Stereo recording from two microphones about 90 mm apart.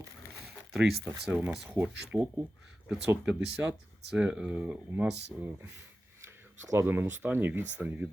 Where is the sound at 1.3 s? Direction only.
10° right (ahead or behind).